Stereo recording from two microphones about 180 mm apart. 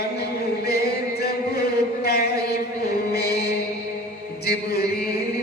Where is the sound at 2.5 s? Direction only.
65° left (ahead or behind).